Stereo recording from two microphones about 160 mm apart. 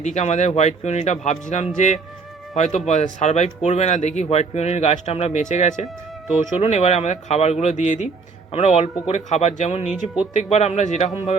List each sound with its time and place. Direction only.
0.0 s speech: 45° left (ahead or behind)